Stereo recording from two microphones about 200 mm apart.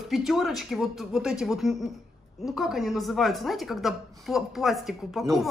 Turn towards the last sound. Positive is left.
turn(degrees=0)  # may be behind; listen again after turning